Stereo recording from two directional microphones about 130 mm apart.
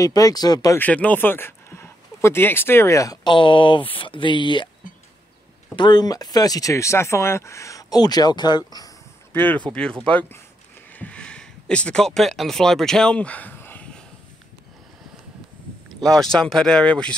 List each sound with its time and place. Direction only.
0.0 s speech: 30° left (ahead or behind)
0.7 s speech: 10° left (ahead or behind)
3.3 s speech: 40° left (ahead or behind)
5.8 s speech: 35° left (ahead or behind)
9.3 s speech: 15° left (ahead or behind)
10.9 s a sound: 10° left (ahead or behind)
16.1 s speech: 5° left (ahead or behind)